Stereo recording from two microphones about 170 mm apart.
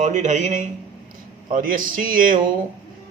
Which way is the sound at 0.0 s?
45° right (ahead or behind).